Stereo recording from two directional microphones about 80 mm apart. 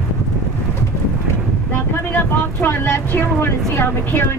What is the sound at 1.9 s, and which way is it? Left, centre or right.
Speech, left.